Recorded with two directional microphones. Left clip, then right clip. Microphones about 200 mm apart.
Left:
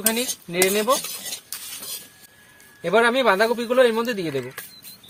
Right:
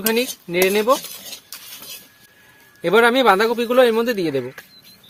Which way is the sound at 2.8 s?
55° right (ahead or behind).